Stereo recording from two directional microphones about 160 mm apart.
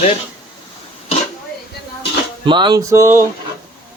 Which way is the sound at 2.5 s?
30° right (ahead or behind).